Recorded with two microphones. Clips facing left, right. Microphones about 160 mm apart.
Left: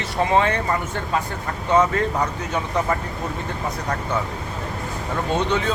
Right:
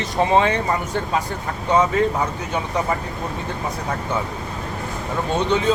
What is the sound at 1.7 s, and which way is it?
Speech, 10° right (ahead or behind).